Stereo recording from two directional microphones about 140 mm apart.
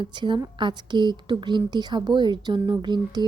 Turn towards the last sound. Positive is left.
turn(degrees=-30)  # may be behind; listen again after turning